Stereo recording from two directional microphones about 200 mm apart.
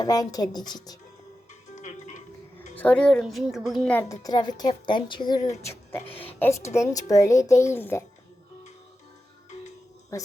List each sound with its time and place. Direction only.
0.0 s speech: 20° left (ahead or behind)
1.7 s music: 35° left (ahead or behind)
2.7 s a woman's voice: 5° left (ahead or behind)
4.2 s speech: 20° left (ahead or behind)
6.4 s a child's voice: 15° left (ahead or behind)
10.1 s a child's voice: 15° left (ahead or behind)